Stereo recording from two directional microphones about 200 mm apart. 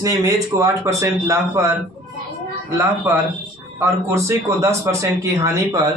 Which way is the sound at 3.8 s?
15° right (ahead or behind).